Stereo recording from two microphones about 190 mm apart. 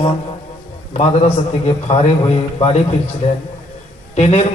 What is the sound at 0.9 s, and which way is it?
A man's voice, 35° left (ahead or behind).